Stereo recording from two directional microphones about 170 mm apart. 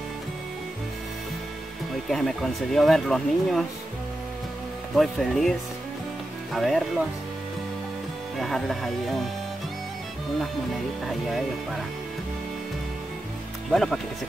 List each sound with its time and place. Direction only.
2.0 s speech: centre (ahead or behind)
4.9 s speech: centre (ahead or behind)
8.4 s speech: centre (ahead or behind)
11.1 s speech: centre (ahead or behind)
13.7 s speech: centre (ahead or behind)